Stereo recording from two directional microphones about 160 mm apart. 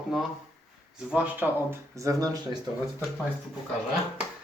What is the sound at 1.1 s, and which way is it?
Speech, 10° right (ahead or behind).